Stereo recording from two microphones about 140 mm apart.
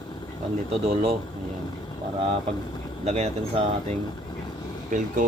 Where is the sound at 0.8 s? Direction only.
45° right (ahead or behind).